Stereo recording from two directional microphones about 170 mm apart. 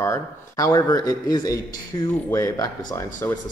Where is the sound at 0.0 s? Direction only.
15° left (ahead or behind).